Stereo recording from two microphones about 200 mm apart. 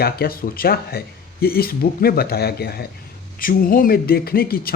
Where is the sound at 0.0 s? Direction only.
50° left (ahead or behind).